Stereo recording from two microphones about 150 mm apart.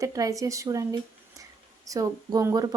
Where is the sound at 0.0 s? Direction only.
20° right (ahead or behind).